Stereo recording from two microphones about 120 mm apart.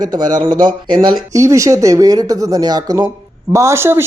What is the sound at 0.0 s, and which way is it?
Speech, 35° right (ahead or behind).